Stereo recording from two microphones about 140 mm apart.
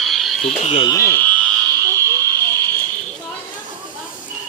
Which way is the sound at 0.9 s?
20° left (ahead or behind).